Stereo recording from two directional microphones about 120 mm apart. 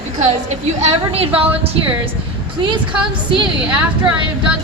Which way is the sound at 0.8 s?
55° right (ahead or behind).